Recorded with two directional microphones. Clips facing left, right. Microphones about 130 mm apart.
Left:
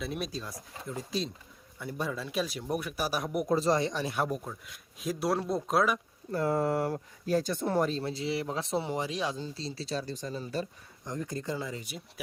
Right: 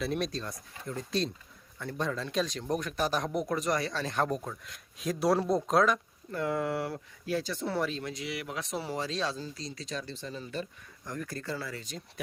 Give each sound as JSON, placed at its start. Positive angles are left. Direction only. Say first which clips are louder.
{"t": 0.0, "sound": "speech", "louder": "right 3 dB", "side_deg": 5}
{"t": 3.4, "sound": "speech", "louder": "left 4 dB", "side_deg": 30}
{"t": 6.3, "sound": "speech", "louder": "left 3 dB", "side_deg": 40}
{"t": 9.6, "sound": "speech", "louder": "left 3 dB", "side_deg": 30}
{"t": 11.0, "sound": "speech", "louder": "left 2 dB", "side_deg": 20}